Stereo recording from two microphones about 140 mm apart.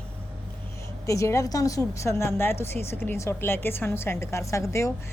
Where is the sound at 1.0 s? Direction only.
20° left (ahead or behind).